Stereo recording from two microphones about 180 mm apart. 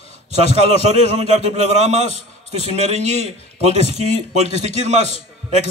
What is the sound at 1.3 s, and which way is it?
A man's voice, 40° right (ahead or behind).